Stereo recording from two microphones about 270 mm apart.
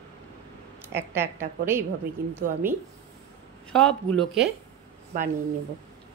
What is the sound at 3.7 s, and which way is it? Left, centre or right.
Speech, centre.